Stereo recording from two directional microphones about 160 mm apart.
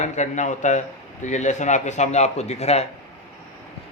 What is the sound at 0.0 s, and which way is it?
A man's voice, 50° left (ahead or behind).